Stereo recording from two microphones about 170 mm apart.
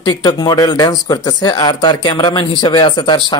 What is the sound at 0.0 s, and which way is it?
Speech, 25° left (ahead or behind).